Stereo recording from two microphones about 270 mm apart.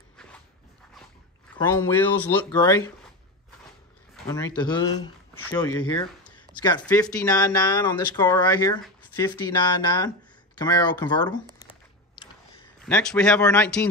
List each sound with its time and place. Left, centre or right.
1.6 s speech: centre
4.6 s speech: centre
6.3 s a sound: centre
6.8 s speech: centre
12.8 s speech: centre